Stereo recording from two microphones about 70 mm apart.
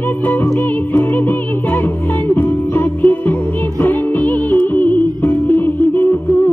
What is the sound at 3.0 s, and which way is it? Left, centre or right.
Music, left.